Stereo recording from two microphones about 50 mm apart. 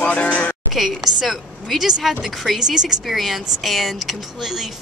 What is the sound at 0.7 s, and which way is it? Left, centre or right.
Speech, centre.